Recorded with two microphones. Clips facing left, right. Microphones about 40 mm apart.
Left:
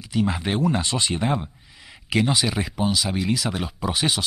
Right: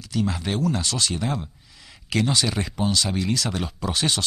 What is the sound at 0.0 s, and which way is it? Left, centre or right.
Speech, centre.